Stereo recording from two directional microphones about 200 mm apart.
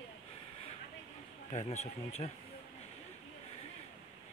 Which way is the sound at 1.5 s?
35° left (ahead or behind).